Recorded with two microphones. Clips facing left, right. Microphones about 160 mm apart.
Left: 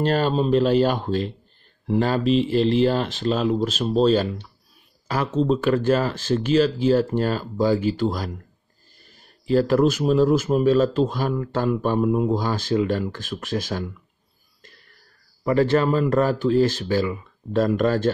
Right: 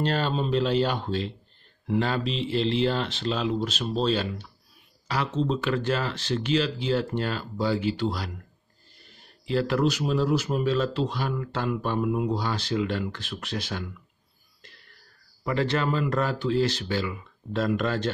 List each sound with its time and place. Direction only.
0.0 s speech: 45° left (ahead or behind)
15.4 s speech: 45° left (ahead or behind)